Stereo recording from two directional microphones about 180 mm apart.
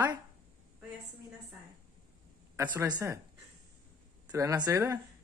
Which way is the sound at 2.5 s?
15° right (ahead or behind).